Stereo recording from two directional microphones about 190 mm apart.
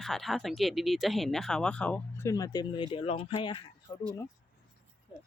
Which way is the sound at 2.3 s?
20° left (ahead or behind).